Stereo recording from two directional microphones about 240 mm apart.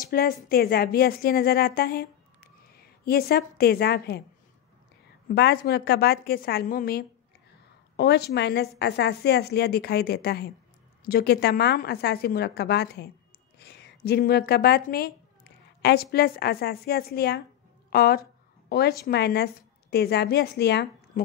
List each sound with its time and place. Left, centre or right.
0.1 s a woman's voice: left
5.3 s a woman's voice: left